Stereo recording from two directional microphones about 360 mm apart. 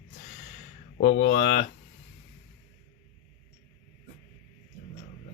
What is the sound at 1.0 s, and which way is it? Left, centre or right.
Speech, left.